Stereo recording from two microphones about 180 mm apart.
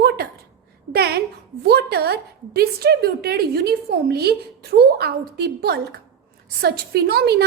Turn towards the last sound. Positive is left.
turn(degrees=-60)  # may be behind; listen again after turning